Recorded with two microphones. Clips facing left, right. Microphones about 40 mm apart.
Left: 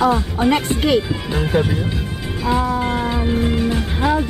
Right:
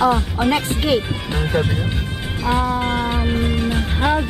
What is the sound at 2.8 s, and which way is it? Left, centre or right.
Cat, right.